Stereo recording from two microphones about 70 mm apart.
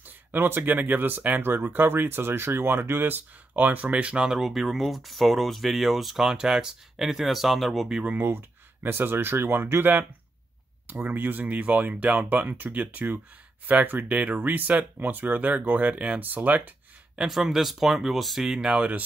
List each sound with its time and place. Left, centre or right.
0.0 s speech: right
4.3 s speech: centre
8.2 s speech: right
17.2 s speech: centre